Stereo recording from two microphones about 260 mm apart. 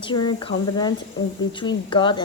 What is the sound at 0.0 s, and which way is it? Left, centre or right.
A woman's voice, centre.